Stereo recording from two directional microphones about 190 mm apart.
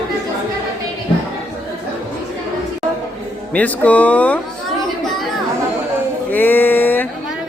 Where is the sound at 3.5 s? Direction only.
10° left (ahead or behind).